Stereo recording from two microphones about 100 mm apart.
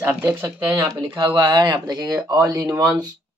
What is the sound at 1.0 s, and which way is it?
Speech, 55° right (ahead or behind).